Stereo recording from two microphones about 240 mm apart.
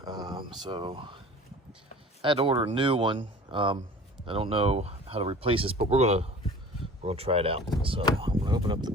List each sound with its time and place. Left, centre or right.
0.0 s a sound: centre
0.6 s speech: centre
2.2 s speech: right